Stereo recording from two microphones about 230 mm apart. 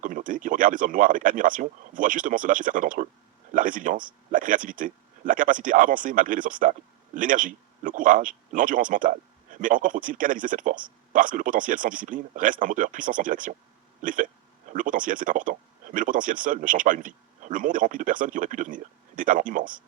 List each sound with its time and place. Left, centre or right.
0.0 s speech: right